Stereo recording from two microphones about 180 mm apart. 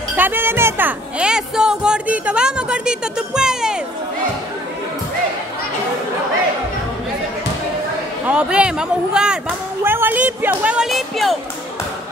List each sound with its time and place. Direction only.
0.1 s speech: 10° right (ahead or behind)
8.3 s speech: 5° right (ahead or behind)